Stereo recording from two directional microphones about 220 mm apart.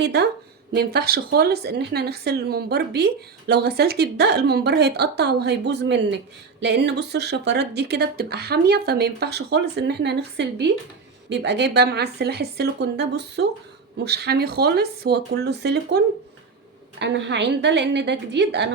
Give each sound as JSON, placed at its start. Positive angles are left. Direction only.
{"t": 0.0, "sound": "speech", "side_deg": -50}